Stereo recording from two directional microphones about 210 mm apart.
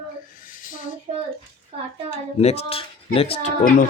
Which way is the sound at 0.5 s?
40° left (ahead or behind).